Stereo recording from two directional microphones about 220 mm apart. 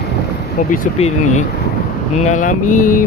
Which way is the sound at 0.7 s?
30° left (ahead or behind).